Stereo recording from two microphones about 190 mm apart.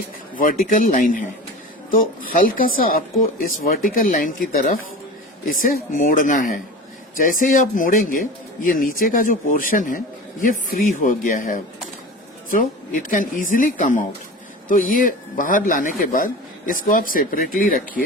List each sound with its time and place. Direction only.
0.3 s a man's voice: 45° left (ahead or behind)